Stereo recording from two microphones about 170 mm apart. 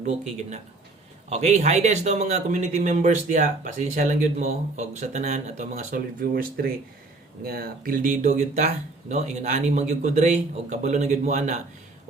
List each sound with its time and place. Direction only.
0.0 s a man's voice: 45° right (ahead or behind)